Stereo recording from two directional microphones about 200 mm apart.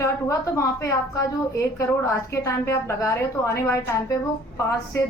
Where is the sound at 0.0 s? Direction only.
15° left (ahead or behind).